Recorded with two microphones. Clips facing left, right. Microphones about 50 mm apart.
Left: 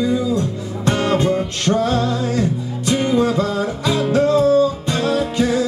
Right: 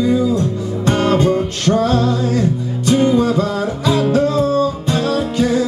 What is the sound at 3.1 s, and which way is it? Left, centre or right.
Music, centre.